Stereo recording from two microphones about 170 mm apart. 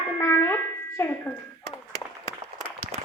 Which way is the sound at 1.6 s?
35° left (ahead or behind).